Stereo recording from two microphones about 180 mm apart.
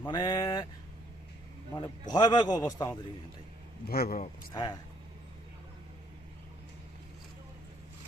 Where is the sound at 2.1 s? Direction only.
25° left (ahead or behind).